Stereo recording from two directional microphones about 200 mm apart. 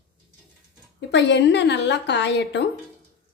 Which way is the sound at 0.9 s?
60° left (ahead or behind).